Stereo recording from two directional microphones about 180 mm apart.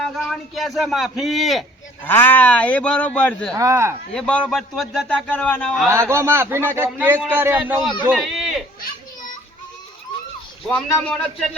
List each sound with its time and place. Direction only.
0.0 s speech: centre (ahead or behind)
2.0 s speech: 10° left (ahead or behind)
3.5 s speech: 20° right (ahead or behind)
4.1 s a man's voice: 5° left (ahead or behind)
5.9 s speech: 15° right (ahead or behind)
8.0 s a sound: 5° right (ahead or behind)
10.7 s speech: 5° left (ahead or behind)